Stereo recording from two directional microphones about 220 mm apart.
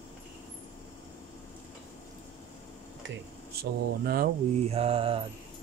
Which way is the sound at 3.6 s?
45° right (ahead or behind).